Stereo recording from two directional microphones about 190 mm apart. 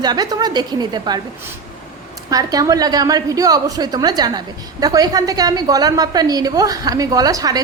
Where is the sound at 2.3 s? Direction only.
20° right (ahead or behind).